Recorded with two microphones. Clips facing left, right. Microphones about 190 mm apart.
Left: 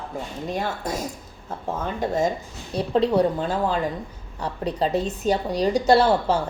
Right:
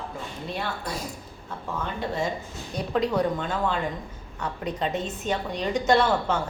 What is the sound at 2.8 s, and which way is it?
Speech, 30° left (ahead or behind).